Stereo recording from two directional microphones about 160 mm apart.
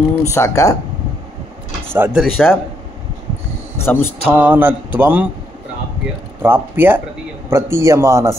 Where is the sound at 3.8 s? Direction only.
15° left (ahead or behind).